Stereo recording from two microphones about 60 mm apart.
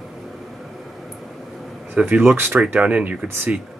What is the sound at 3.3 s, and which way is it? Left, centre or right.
Speech, right.